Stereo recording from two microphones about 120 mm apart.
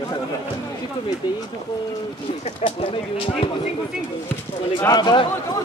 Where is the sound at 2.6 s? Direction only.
50° left (ahead or behind).